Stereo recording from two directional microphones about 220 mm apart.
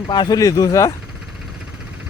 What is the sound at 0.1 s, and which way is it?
Speech, 20° left (ahead or behind).